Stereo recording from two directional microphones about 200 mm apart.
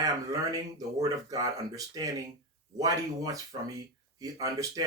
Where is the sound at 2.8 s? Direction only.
20° right (ahead or behind).